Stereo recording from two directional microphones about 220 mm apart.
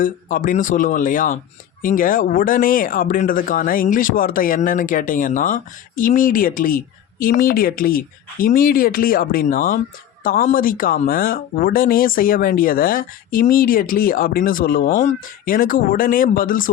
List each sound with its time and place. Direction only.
0.0 s speech: 40° left (ahead or behind)